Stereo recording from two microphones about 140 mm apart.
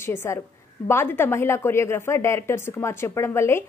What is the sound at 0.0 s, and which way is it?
A woman's voice, 20° left (ahead or behind).